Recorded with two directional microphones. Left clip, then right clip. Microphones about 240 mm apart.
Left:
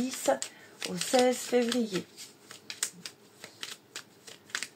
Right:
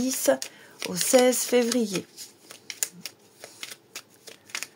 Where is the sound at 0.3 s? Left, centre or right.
Right.